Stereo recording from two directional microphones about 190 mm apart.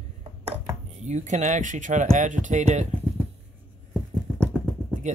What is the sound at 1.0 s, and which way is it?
Speech, 40° right (ahead or behind).